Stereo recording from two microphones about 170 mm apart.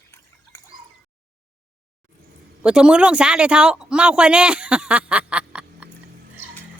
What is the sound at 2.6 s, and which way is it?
Speech, 5° right (ahead or behind).